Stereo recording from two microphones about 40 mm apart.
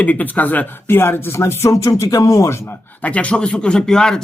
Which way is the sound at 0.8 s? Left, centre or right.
Left.